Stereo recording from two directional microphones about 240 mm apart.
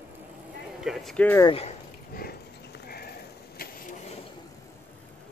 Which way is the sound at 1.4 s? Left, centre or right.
Left.